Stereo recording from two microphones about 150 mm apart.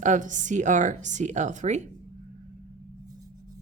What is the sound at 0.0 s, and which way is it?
Speech, 60° right (ahead or behind).